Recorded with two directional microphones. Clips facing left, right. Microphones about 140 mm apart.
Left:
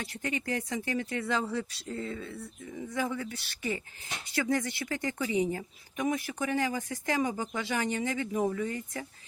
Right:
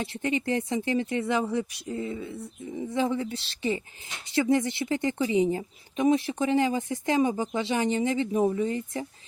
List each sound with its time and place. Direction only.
0.0 s a woman's voice: 25° right (ahead or behind)